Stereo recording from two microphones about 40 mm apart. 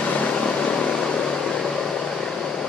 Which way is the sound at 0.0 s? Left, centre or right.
Left.